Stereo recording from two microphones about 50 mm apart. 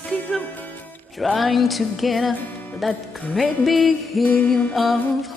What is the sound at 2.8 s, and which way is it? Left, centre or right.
Speech, centre.